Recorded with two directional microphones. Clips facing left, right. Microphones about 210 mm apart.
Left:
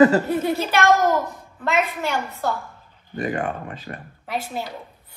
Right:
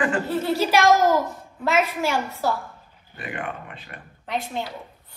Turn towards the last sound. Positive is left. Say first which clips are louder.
# even
turn(degrees=5)  # may be behind; listen again after turning